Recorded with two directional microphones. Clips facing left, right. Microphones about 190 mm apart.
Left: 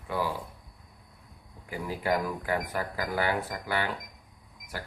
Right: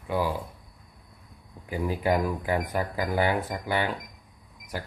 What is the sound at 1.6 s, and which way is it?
Speech, 20° right (ahead or behind).